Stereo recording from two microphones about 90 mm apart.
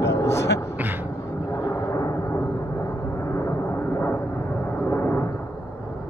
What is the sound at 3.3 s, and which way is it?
Vehicle, 30° left (ahead or behind).